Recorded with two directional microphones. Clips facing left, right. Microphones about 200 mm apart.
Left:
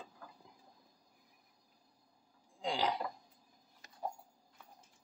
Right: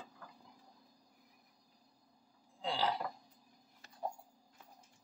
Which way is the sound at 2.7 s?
15° left (ahead or behind).